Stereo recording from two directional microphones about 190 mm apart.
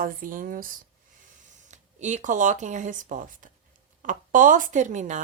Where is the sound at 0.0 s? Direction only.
45° right (ahead or behind).